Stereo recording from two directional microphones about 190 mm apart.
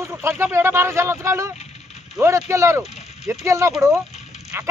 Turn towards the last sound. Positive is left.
turn(degrees=-10)  # may be behind; listen again after turning